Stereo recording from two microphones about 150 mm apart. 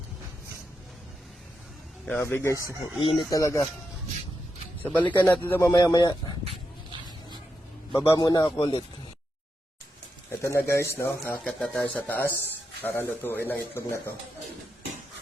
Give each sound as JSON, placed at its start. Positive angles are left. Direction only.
{"t": 2.0, "sound": "speech", "side_deg": 10}
{"t": 3.0, "sound": "speech", "side_deg": 30}
{"t": 4.8, "sound": "speech", "side_deg": 10}
{"t": 5.7, "sound": "speech", "side_deg": 25}
{"t": 8.0, "sound": "speech", "side_deg": 25}
{"t": 10.4, "sound": "speech", "side_deg": 15}